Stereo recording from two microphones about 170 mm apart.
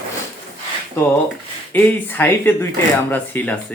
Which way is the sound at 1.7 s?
10° left (ahead or behind).